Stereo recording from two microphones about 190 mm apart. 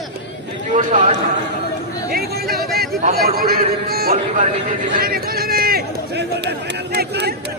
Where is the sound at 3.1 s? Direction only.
50° right (ahead or behind).